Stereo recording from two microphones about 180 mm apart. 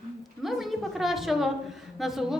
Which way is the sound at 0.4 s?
Centre (ahead or behind).